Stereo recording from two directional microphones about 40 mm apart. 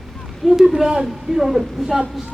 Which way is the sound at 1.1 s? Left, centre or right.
Centre.